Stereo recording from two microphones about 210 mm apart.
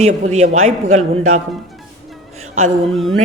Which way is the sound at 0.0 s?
35° right (ahead or behind).